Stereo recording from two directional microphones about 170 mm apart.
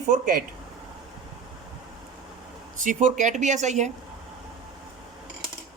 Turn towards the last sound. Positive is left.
turn(degrees=-45)  # may be behind; listen again after turning